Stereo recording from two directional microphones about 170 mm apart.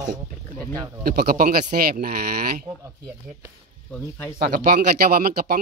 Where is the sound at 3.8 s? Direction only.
10° left (ahead or behind).